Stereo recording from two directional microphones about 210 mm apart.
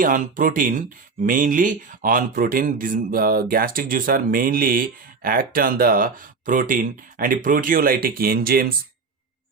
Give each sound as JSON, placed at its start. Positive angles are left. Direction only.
{"t": 0.0, "sound": "speech", "side_deg": -40}